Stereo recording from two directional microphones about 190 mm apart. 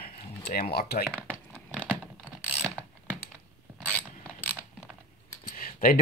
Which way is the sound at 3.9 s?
10° left (ahead or behind).